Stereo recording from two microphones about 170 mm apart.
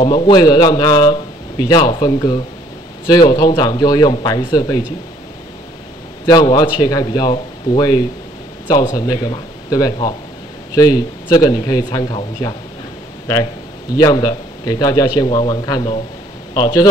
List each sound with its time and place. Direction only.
0.0 s speech: 30° left (ahead or behind)
6.2 s speech: 25° left (ahead or behind)
13.9 s speech: 25° left (ahead or behind)